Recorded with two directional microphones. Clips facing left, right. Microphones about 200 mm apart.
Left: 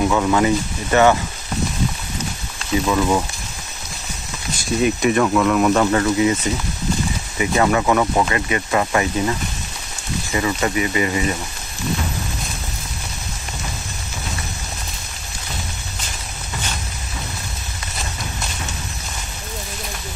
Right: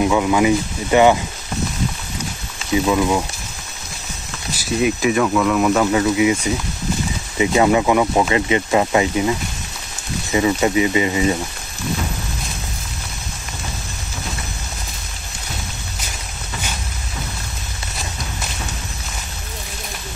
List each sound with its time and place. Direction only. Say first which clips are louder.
0.0 s speech: right 1 dB; 10° right (ahead or behind)
2.7 s speech: right 2 dB; 15° right (ahead or behind)
4.6 s speech: even; 5° right (ahead or behind); by 11.3 s 20° right (ahead or behind)